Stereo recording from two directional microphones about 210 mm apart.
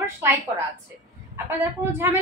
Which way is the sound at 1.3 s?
10° right (ahead or behind).